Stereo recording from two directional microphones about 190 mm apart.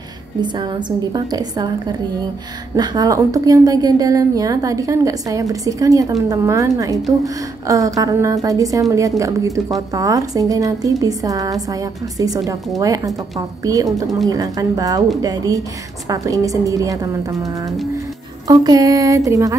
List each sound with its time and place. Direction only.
0.4 s a woman's voice: 25° right (ahead or behind)